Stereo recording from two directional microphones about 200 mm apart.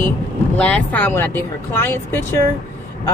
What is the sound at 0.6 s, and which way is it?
A woman's voice, 5° left (ahead or behind).